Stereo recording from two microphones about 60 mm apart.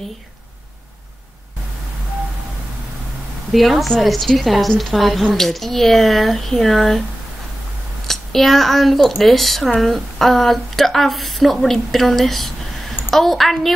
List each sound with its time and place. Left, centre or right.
3.5 s a woman's voice: centre
8.1 s a woman's voice: centre